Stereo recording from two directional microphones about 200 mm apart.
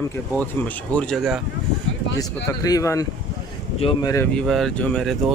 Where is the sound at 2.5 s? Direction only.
15° left (ahead or behind).